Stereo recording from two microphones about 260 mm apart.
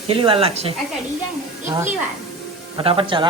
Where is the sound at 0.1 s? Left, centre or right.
Centre.